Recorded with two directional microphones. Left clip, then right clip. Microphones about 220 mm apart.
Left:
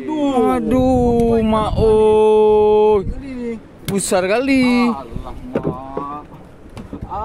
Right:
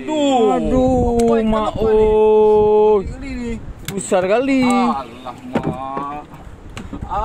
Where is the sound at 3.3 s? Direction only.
15° right (ahead or behind).